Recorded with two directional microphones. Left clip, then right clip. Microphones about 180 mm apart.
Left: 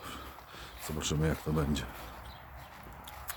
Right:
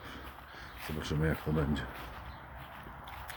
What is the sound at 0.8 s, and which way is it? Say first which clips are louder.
Speech: left 1 dB; 20° left (ahead or behind).